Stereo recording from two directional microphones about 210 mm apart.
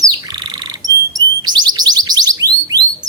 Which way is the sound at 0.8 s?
15° right (ahead or behind).